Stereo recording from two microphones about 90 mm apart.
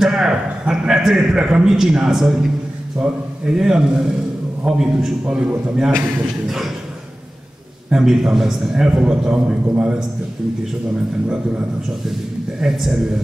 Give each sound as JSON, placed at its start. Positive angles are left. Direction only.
{"t": 0.0, "sound": "a sound", "side_deg": -5}
{"t": 3.0, "sound": "a man's voice", "side_deg": -5}
{"t": 7.9, "sound": "a man's voice", "side_deg": -5}
{"t": 12.1, "sound": "a man's voice", "side_deg": -5}